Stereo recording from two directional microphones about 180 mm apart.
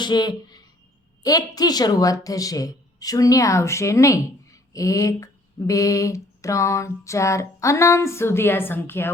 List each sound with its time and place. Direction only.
0.0 s a woman's voice: 25° left (ahead or behind)